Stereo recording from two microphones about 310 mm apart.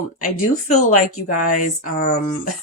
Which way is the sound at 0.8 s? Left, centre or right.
Left.